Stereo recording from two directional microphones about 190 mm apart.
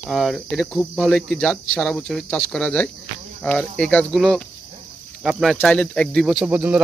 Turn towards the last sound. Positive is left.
turn(degrees=-10)  # may be behind; listen again after turning